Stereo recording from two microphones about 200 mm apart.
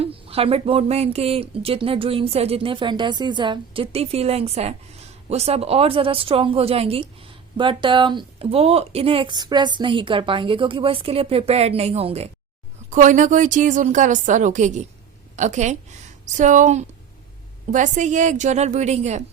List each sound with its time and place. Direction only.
0.0 s a woman's voice: 30° right (ahead or behind)